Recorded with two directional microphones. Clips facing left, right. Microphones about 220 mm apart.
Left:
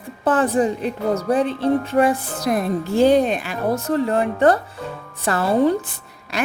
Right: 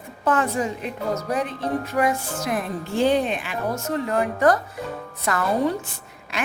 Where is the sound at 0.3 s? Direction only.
35° left (ahead or behind).